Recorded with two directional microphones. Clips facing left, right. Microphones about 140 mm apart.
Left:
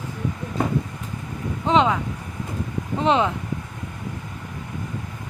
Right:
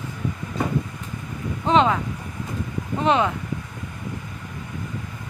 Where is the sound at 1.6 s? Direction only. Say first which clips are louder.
Even; 15° left (ahead or behind).